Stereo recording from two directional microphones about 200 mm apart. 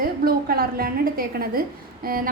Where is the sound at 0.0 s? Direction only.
50° right (ahead or behind).